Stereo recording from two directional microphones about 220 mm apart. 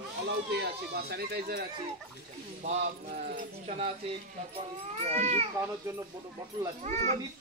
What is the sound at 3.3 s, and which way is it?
Speech, 30° right (ahead or behind).